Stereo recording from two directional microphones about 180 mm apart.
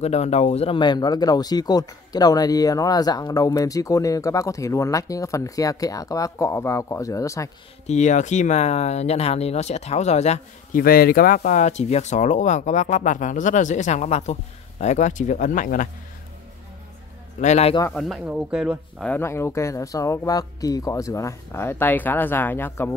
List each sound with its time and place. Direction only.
0.0 s speech: 35° left (ahead or behind); by 7.5 s 15° left (ahead or behind)
7.8 s speech: 40° left (ahead or behind)
10.8 s speech: 55° left (ahead or behind)
17.4 s speech: 40° left (ahead or behind)
17.9 s speech: centre (ahead or behind)
19.0 s speech: 15° left (ahead or behind)